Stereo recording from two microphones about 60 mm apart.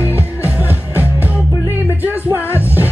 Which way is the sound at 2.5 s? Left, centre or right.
Right.